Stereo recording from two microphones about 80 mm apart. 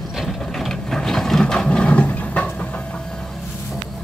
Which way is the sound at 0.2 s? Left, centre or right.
Centre.